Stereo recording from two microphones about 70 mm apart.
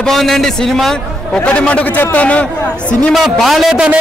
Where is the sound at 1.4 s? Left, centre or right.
Centre.